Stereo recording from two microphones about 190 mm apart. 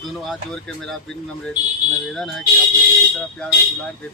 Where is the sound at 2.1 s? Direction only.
Centre (ahead or behind).